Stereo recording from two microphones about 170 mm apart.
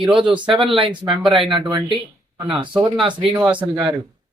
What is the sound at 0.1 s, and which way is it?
Speech, 30° right (ahead or behind).